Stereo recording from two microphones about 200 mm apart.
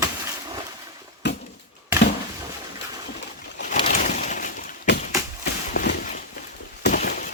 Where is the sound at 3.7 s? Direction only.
30° left (ahead or behind).